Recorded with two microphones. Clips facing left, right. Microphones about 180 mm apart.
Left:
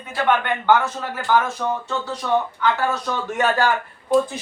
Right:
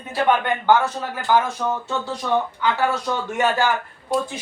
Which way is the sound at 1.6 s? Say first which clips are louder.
Even; 5° right (ahead or behind).